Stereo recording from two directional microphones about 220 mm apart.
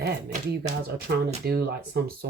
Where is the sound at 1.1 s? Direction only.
45° right (ahead or behind).